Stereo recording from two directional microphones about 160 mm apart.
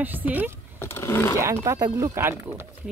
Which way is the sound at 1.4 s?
20° right (ahead or behind).